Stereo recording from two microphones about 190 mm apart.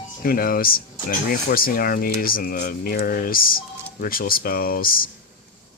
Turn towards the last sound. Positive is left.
turn(degrees=50)  # may be behind; listen again after turning